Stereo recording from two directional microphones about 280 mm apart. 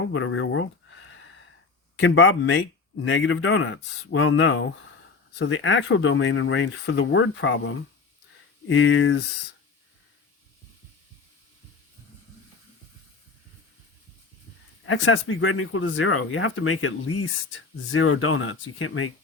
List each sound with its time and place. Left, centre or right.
0.1 s speech: left
2.0 s speech: left
14.8 s speech: left